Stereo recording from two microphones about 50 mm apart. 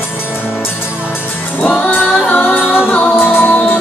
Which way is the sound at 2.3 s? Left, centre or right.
Left.